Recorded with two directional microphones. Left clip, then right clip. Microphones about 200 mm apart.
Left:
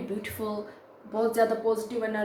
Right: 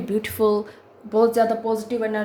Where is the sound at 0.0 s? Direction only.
50° right (ahead or behind).